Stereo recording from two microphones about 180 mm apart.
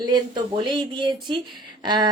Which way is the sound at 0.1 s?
25° right (ahead or behind).